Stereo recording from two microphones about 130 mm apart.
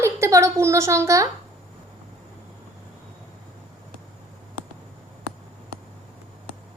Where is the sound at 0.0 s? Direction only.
25° right (ahead or behind).